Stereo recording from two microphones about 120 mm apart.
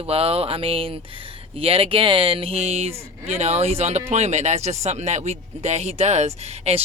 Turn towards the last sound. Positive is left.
turn(degrees=-60)  # may be behind; listen again after turning